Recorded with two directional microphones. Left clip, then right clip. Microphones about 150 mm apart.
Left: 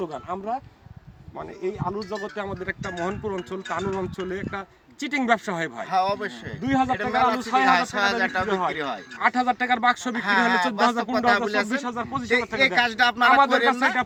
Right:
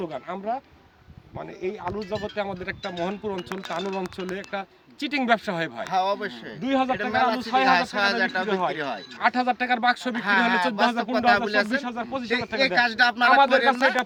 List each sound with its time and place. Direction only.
0.0 s speech: 25° right (ahead or behind)
5.9 s speech: 5° right (ahead or behind)
6.6 s speech: 20° right (ahead or behind)
6.9 s speech: 5° right (ahead or behind)
7.3 s speech: 25° right (ahead or behind)
7.6 s speech: 10° right (ahead or behind)
9.1 s speech: 25° right (ahead or behind)
10.2 s speech: 5° right (ahead or behind)
11.8 s speech: 25° right (ahead or behind)
12.5 s speech: 10° right (ahead or behind)